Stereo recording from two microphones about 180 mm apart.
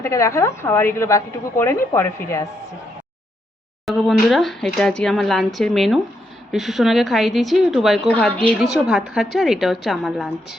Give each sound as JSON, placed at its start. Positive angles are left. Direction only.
{"t": 0.0, "sound": "a woman's voice", "side_deg": 15}
{"t": 3.8, "sound": "speech", "side_deg": 0}